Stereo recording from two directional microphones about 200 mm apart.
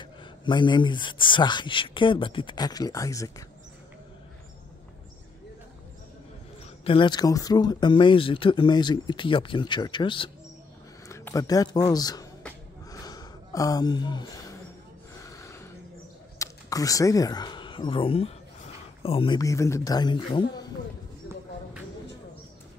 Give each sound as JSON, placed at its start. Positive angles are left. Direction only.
{"t": 0.0, "sound": "speech", "side_deg": 25}
{"t": 6.8, "sound": "speech", "side_deg": 25}
{"t": 11.1, "sound": "speech", "side_deg": 15}
{"t": 12.9, "sound": "a sound", "side_deg": 20}
{"t": 15.1, "sound": "gasp", "side_deg": 15}
{"t": 16.3, "sound": "speech", "side_deg": 15}